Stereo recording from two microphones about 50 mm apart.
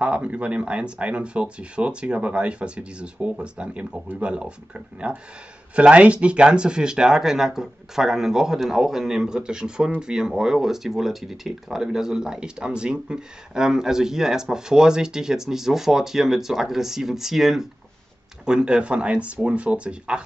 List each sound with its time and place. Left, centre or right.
0.0 s speech: right